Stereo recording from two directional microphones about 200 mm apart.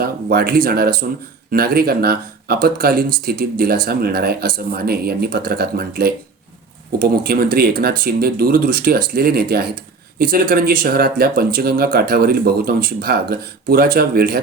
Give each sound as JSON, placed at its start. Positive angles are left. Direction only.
{"t": 0.0, "sound": "speech", "side_deg": -50}